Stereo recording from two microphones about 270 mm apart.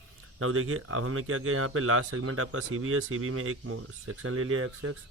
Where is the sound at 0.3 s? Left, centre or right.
Right.